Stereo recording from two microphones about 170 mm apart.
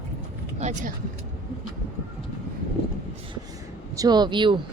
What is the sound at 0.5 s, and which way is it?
Vehicle, 45° right (ahead or behind).